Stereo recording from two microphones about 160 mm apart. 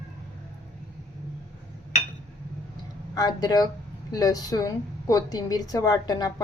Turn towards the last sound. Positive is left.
turn(degrees=25)  # may be behind; listen again after turning